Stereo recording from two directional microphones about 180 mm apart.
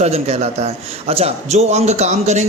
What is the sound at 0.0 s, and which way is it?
A man's voice, 35° right (ahead or behind).